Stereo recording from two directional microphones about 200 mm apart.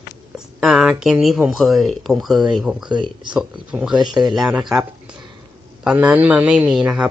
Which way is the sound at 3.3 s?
5° right (ahead or behind).